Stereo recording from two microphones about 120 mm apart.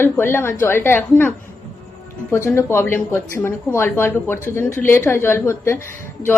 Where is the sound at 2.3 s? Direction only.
20° left (ahead or behind).